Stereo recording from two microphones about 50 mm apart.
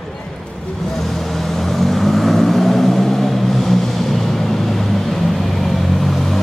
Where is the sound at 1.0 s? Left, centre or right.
Centre.